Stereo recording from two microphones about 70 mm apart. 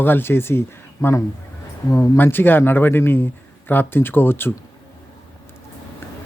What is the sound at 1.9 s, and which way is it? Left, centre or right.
Speech, left.